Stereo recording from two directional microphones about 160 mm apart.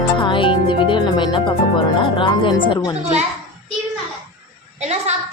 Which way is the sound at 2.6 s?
30° left (ahead or behind).